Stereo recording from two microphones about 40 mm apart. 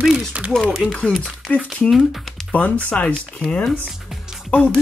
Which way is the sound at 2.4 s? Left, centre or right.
Left.